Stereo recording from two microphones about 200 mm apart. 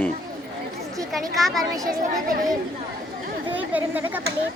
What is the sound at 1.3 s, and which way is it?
Speech, centre (ahead or behind).